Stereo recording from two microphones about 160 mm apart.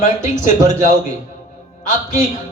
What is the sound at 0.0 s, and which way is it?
Speech, 50° left (ahead or behind).